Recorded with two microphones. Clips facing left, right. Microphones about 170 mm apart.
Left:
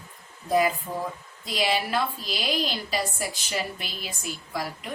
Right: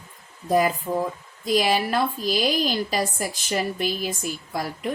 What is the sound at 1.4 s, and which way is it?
A woman's voice, 45° right (ahead or behind).